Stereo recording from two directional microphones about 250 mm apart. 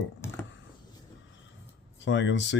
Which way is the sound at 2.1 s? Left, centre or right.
Left.